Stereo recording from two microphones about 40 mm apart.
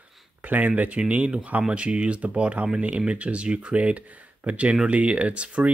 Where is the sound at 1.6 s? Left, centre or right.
Right.